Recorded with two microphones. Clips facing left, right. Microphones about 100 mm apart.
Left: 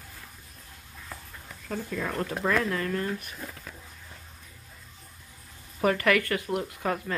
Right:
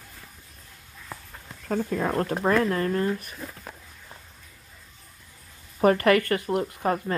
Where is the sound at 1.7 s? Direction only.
40° right (ahead or behind).